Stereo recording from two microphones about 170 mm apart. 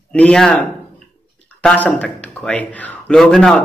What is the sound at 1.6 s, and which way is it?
Speech, 5° left (ahead or behind).